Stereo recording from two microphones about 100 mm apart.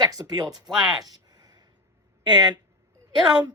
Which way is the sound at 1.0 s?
40° right (ahead or behind).